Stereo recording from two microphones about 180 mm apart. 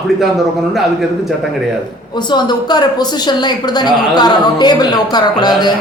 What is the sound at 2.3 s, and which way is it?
A woman's voice, 25° left (ahead or behind).